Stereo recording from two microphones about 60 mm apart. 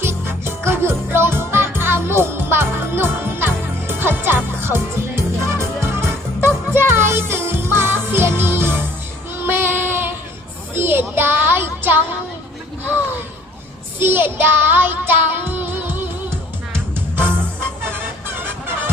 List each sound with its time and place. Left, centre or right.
0.0 s music: right
9.4 s child singing: right
14.0 s music: right